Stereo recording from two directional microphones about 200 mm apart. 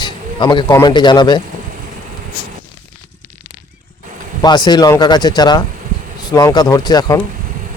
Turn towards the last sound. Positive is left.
turn(degrees=20)  # may be behind; listen again after turning